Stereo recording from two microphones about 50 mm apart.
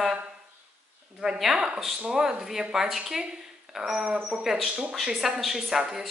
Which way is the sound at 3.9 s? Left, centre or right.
Right.